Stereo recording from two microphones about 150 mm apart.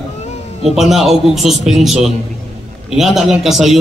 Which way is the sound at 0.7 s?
Centre (ahead or behind).